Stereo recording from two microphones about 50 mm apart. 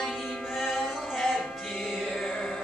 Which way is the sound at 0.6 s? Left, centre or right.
Centre.